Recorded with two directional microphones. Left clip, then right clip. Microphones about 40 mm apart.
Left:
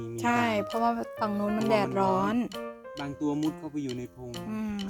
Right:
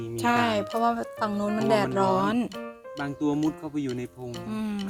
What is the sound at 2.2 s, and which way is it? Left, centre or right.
Speech, left.